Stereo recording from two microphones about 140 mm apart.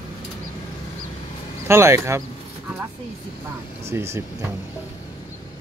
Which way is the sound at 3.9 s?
20° right (ahead or behind).